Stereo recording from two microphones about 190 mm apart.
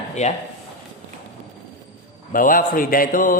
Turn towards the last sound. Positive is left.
turn(degrees=45)  # may be behind; listen again after turning